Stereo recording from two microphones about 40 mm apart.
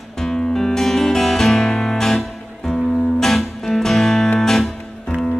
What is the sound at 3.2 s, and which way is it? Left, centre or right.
Music, centre.